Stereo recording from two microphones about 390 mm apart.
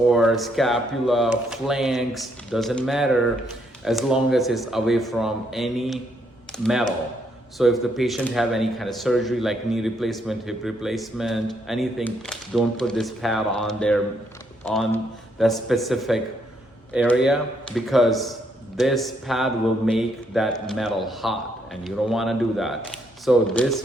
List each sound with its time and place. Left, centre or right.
0.1 s speech: centre